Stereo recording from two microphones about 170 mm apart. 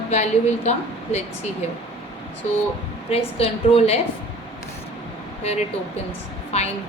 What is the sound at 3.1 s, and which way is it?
Speech, 35° left (ahead or behind).